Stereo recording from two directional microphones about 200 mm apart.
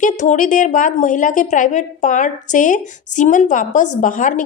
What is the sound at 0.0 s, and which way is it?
A woman's voice, 40° left (ahead or behind).